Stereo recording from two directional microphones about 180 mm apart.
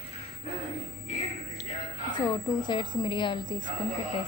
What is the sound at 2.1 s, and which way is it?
A woman's voice, 25° left (ahead or behind).